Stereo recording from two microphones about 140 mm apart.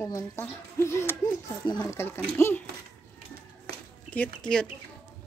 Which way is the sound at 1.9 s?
20° left (ahead or behind).